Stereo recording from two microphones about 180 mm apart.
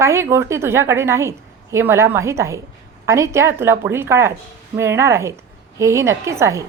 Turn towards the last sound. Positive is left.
turn(degrees=-15)  # may be behind; listen again after turning